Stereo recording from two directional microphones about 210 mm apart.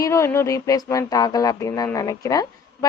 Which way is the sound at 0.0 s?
15° left (ahead or behind).